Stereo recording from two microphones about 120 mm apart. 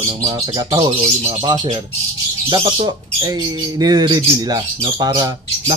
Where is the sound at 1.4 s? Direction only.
40° right (ahead or behind).